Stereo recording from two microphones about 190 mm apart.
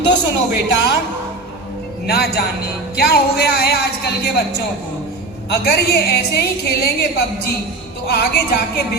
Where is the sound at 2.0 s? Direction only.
60° left (ahead or behind).